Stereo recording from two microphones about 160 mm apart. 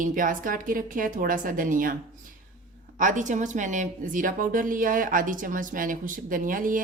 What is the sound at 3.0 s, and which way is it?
A woman's voice, 55° right (ahead or behind).